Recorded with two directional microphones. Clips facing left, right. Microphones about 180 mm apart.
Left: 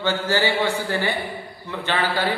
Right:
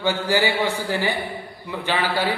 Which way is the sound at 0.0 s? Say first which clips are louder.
Right 1 dB; 15° right (ahead or behind).